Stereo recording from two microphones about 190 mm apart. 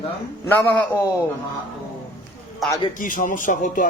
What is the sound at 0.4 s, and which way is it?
Speech, 10° left (ahead or behind).